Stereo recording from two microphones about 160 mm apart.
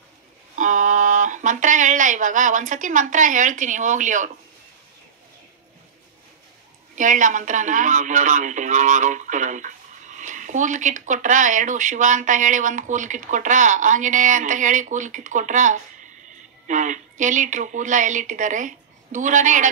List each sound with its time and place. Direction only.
0.6 s speech: 50° right (ahead or behind)
7.0 s speech: 55° right (ahead or behind)